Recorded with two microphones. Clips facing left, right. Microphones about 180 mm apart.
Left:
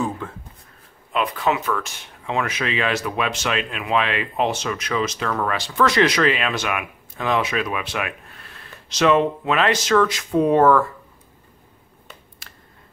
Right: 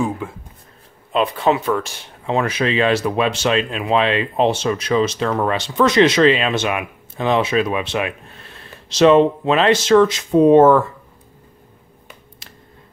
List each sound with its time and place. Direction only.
0.0 s a sound: 10° right (ahead or behind)
1.1 s speech: 30° right (ahead or behind)
12.4 s tick: 20° right (ahead or behind)